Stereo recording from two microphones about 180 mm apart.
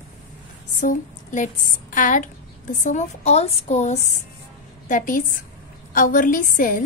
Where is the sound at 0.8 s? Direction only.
45° left (ahead or behind).